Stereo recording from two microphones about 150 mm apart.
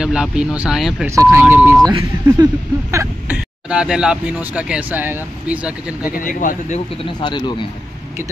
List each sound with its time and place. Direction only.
0.0 s speech: 5° right (ahead or behind)
1.0 s speech: 20° right (ahead or behind)
1.9 s speech: 25° right (ahead or behind)
3.3 s speech: 5° right (ahead or behind)
6.1 s speech: 60° left (ahead or behind)
7.2 s speech: 30° left (ahead or behind)